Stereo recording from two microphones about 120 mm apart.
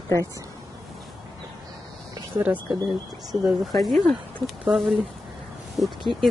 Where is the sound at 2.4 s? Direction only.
30° right (ahead or behind).